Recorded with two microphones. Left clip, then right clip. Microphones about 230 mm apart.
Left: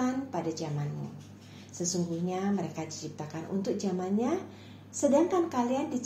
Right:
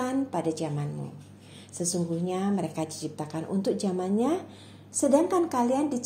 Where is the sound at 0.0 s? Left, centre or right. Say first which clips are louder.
Right 4 dB; right.